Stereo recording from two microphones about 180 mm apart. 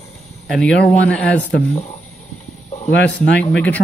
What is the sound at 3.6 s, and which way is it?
Speech, 10° left (ahead or behind).